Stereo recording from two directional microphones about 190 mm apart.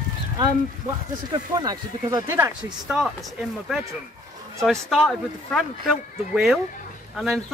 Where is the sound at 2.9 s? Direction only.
Centre (ahead or behind).